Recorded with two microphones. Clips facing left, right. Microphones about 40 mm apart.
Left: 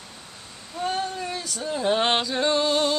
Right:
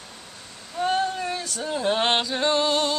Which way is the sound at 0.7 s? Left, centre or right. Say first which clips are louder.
Right 4 dB; centre.